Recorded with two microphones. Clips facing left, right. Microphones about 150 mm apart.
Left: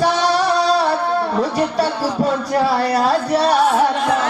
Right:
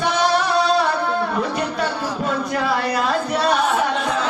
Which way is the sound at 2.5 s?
35° left (ahead or behind).